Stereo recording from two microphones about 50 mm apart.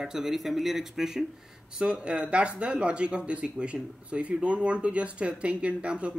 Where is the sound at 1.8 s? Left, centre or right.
Right.